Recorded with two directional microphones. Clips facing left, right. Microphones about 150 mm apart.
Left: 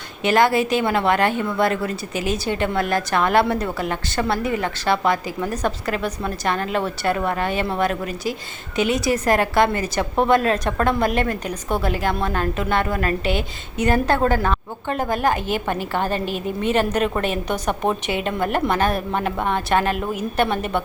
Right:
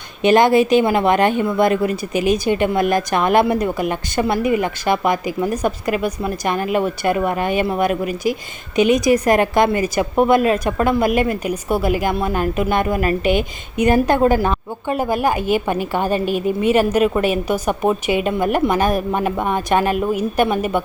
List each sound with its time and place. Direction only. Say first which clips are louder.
0.2 s a woman's voice: right 5 dB; 20° right (ahead or behind)